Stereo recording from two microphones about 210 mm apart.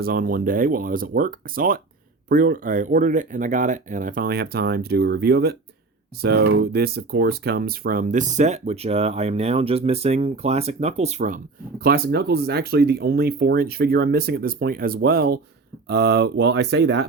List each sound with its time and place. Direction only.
0.0 s speech: 45° right (ahead or behind)
11.8 s speech: 45° right (ahead or behind)